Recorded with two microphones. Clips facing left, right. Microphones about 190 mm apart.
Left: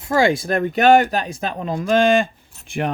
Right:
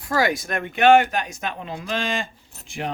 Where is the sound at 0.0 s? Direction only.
25° left (ahead or behind).